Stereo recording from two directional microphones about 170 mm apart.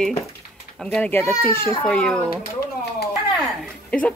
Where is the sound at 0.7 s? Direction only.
5° left (ahead or behind).